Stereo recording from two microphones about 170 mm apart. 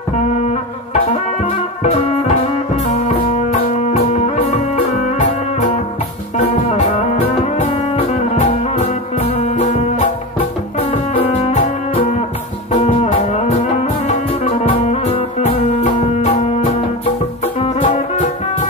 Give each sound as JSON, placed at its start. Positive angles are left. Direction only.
{"t": 1.8, "sound": "music", "side_deg": 35}
{"t": 10.8, "sound": "music", "side_deg": 35}